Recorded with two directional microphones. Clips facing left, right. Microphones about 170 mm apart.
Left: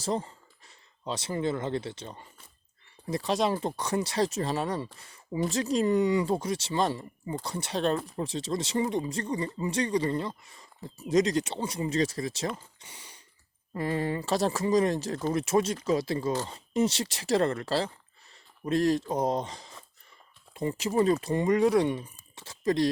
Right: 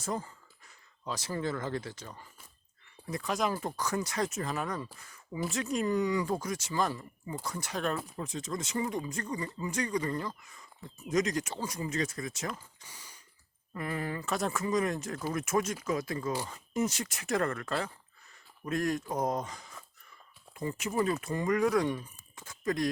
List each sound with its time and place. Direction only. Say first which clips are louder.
0.0 s speech: left 5 dB; 30° left (ahead or behind)